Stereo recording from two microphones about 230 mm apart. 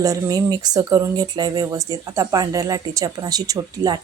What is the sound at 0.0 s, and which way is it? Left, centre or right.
Speech, centre.